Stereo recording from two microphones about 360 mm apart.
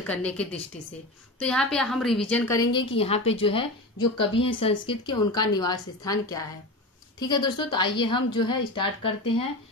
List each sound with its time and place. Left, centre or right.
0.0 s a woman's voice: centre